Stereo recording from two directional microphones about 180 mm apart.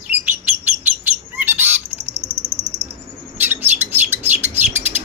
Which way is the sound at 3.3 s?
10° right (ahead or behind).